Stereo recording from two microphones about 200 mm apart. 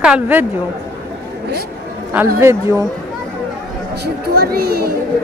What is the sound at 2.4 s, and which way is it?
Speech, 15° right (ahead or behind).